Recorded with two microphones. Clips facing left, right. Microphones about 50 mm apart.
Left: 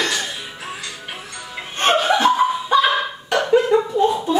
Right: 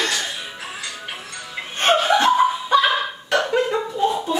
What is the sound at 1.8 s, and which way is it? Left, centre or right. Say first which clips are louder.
Chuckle: left 1 dB; centre.